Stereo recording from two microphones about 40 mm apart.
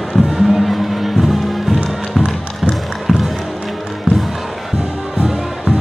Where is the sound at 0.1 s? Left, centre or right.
Centre.